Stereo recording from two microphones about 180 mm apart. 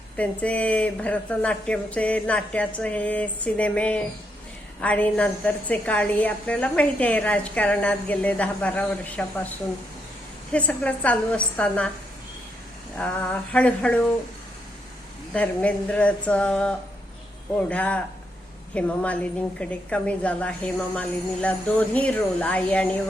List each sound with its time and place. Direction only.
0.2 s a woman's voice: 5° left (ahead or behind)
10.5 s a woman's voice: 5° left (ahead or behind)
13.0 s a woman's voice: 5° left (ahead or behind)
15.3 s a woman's voice: 5° left (ahead or behind)